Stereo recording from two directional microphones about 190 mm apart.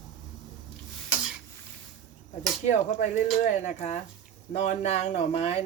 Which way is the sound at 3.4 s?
40° left (ahead or behind).